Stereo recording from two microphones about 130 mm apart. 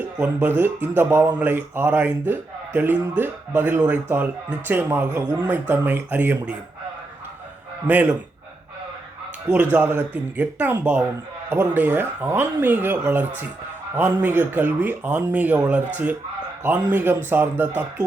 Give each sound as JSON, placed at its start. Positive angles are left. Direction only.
{"t": 0.0, "sound": "speech", "side_deg": -15}
{"t": 7.9, "sound": "speech", "side_deg": -10}
{"t": 9.5, "sound": "speech", "side_deg": -15}